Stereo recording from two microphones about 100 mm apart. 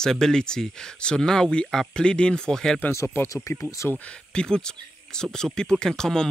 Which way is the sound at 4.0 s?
10° left (ahead or behind).